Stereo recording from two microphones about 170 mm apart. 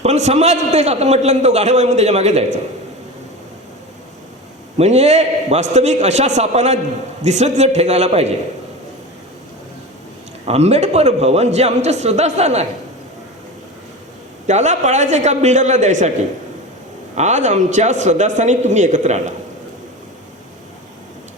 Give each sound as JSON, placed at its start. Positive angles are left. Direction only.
{"t": 0.0, "sound": "a man's voice", "side_deg": -40}
{"t": 4.8, "sound": "a man's voice", "side_deg": -40}
{"t": 10.4, "sound": "a man's voice", "side_deg": -40}
{"t": 14.4, "sound": "a man's voice", "side_deg": -45}
{"t": 17.2, "sound": "a man's voice", "side_deg": -45}